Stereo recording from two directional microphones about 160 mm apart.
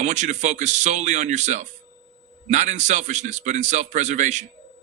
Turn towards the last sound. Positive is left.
turn(degrees=-50)  # may be behind; listen again after turning